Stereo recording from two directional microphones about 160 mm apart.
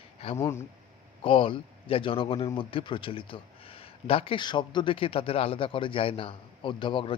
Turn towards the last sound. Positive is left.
turn(degrees=30)  # may be behind; listen again after turning